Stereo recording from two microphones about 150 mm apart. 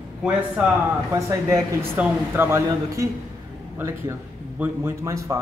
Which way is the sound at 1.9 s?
15° right (ahead or behind).